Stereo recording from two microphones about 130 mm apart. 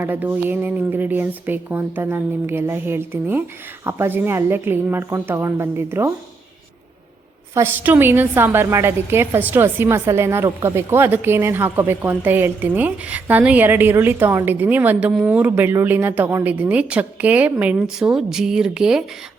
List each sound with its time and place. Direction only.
0.0 s a woman's voice: 15° right (ahead or behind)
7.5 s a woman's voice: 20° right (ahead or behind)